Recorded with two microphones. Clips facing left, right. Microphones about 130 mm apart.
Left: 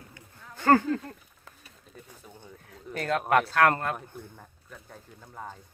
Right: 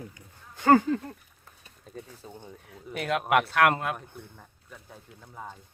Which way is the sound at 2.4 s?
15° right (ahead or behind).